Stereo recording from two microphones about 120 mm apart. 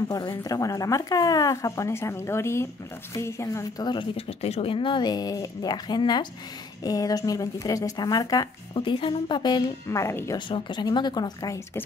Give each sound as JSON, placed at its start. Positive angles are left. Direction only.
{"t": 0.1, "sound": "speech", "side_deg": 35}
{"t": 4.3, "sound": "a woman's voice", "side_deg": 60}
{"t": 8.7, "sound": "a woman's voice", "side_deg": 45}
{"t": 9.8, "sound": "speech", "side_deg": 25}
{"t": 10.3, "sound": "a woman's voice", "side_deg": 40}